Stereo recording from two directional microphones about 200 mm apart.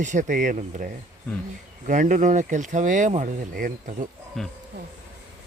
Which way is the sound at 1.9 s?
40° right (ahead or behind).